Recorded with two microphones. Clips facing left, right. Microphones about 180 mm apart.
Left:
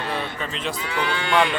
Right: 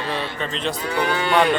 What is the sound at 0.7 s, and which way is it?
Livestock, 40° right (ahead or behind).